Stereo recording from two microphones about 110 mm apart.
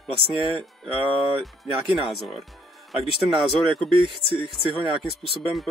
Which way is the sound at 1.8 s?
Centre (ahead or behind).